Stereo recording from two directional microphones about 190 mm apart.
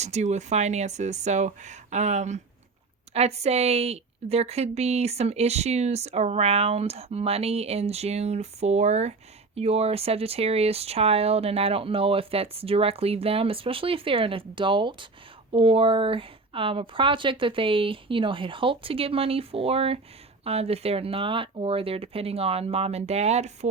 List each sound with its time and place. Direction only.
0.0 s a woman's voice: 35° right (ahead or behind)